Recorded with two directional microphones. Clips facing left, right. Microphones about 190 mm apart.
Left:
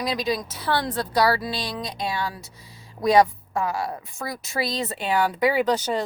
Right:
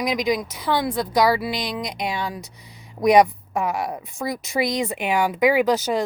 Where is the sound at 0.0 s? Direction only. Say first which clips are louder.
Right 3 dB; 15° right (ahead or behind).